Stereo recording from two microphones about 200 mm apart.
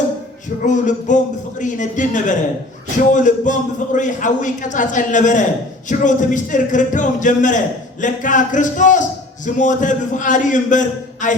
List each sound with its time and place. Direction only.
0.6 s a man's voice: 40° left (ahead or behind)